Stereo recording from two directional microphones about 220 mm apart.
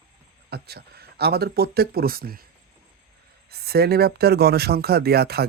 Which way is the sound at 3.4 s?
45° right (ahead or behind).